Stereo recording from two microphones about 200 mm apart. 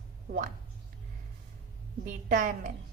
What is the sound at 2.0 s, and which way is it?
Speech, 40° right (ahead or behind).